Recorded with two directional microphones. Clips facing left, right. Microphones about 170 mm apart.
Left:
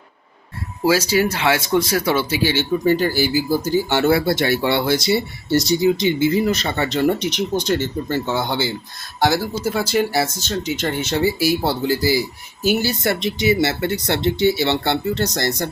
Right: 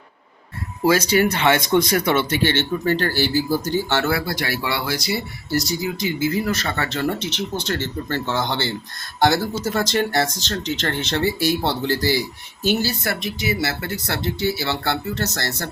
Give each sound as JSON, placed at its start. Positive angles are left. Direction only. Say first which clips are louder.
{"t": 0.9, "sound": "speech", "louder": "even", "side_deg": 5}
{"t": 4.1, "sound": "speech", "louder": "left 7 dB", "side_deg": 25}